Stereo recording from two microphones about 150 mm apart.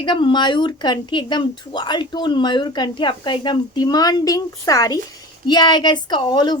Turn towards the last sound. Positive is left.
turn(degrees=30)  # may be behind; listen again after turning